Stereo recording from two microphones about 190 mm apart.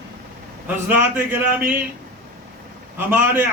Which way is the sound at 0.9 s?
10° right (ahead or behind).